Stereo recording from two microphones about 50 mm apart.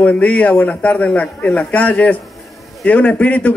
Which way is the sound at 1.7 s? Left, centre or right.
Left.